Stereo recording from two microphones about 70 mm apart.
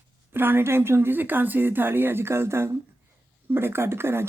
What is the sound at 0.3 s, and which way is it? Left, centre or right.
Speech, right.